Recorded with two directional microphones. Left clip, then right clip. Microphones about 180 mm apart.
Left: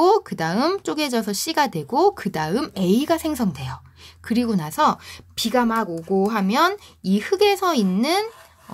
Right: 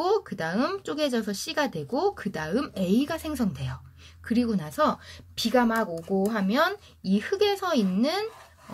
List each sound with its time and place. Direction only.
0.0 s speech: 45° left (ahead or behind)